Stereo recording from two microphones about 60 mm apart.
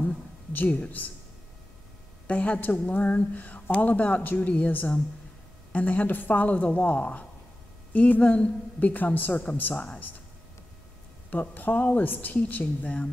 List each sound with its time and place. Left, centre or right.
0.5 s a woman's voice: left
2.2 s a woman's voice: left
11.2 s a woman's voice: left